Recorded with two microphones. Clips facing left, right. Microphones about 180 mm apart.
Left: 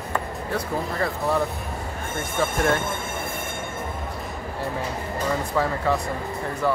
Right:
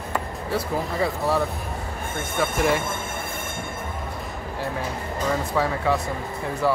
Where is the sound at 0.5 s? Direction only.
5° right (ahead or behind).